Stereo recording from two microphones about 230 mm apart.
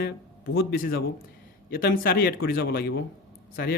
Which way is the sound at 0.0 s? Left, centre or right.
Left.